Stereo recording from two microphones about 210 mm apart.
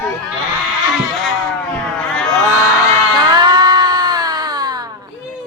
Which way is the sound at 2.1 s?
5° left (ahead or behind).